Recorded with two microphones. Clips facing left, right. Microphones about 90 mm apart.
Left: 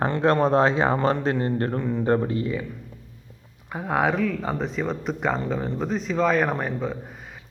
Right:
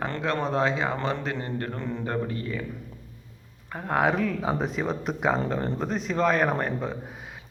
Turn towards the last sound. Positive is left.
turn(degrees=0)  # may be behind; listen again after turning